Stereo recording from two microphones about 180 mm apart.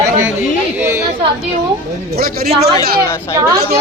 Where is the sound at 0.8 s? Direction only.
15° right (ahead or behind).